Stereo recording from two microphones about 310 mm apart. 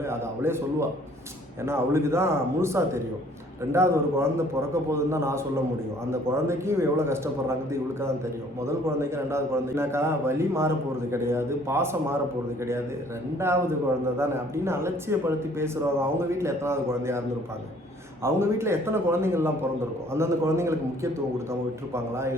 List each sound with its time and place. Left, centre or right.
0.0 s speech: centre
14.2 s speech: centre